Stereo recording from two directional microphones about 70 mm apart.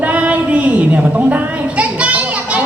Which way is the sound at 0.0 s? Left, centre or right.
Right.